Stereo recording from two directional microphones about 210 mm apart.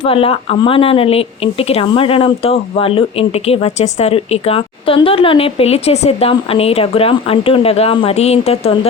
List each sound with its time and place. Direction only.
0.1 s speech: 25° left (ahead or behind)